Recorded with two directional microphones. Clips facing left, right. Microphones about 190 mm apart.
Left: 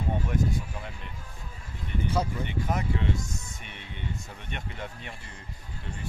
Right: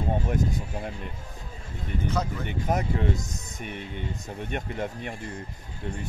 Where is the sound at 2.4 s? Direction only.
45° right (ahead or behind).